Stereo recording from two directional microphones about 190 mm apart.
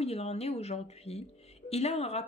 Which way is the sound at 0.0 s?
35° left (ahead or behind).